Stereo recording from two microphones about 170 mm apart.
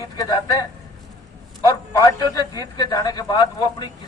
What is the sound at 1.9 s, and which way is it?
A man's voice, 20° left (ahead or behind).